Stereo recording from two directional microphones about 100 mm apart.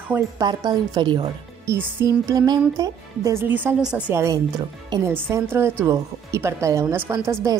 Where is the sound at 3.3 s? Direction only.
20° right (ahead or behind).